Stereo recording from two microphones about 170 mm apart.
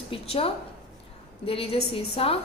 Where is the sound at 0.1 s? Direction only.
35° left (ahead or behind).